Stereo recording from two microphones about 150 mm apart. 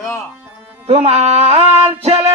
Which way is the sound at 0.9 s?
45° right (ahead or behind).